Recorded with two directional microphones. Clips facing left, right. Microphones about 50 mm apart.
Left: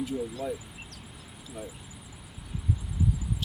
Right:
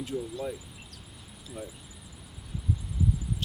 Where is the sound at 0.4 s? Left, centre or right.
Centre.